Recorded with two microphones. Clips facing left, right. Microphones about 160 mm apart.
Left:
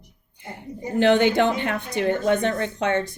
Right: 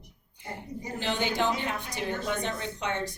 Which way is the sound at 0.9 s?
65° left (ahead or behind).